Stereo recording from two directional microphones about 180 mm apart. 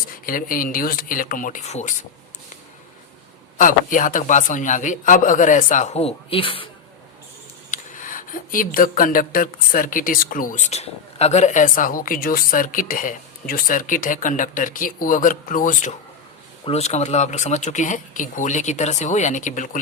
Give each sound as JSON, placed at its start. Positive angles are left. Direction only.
{"t": 0.3, "sound": "speech", "side_deg": 50}
{"t": 3.6, "sound": "speech", "side_deg": 50}
{"t": 7.7, "sound": "speech", "side_deg": 45}